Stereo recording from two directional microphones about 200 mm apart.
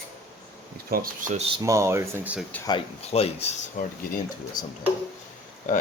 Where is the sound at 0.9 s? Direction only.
50° right (ahead or behind).